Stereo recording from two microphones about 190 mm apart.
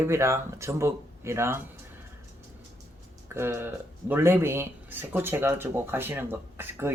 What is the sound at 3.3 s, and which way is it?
Speech, 10° right (ahead or behind).